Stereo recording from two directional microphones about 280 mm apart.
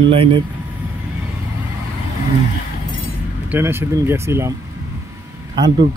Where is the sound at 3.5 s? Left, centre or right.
Centre.